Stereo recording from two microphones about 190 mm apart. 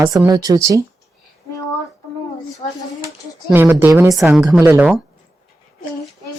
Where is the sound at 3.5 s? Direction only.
10° right (ahead or behind).